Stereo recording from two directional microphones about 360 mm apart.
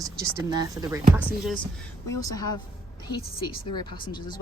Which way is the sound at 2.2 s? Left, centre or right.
Centre.